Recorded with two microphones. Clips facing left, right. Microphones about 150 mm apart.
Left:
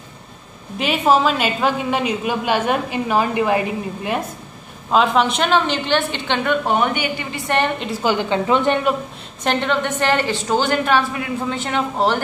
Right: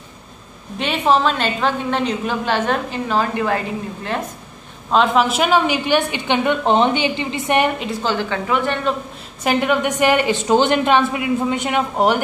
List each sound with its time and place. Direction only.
0.7 s a woman's voice: 5° left (ahead or behind)
4.9 s a woman's voice: centre (ahead or behind); by 7.7 s 15° right (ahead or behind)
8.0 s a woman's voice: 15° left (ahead or behind)
9.4 s a woman's voice: 10° right (ahead or behind)